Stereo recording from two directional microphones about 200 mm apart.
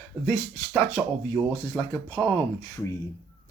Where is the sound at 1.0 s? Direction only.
5° left (ahead or behind).